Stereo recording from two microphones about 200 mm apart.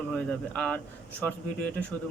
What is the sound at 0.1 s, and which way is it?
Speech, 5° left (ahead or behind).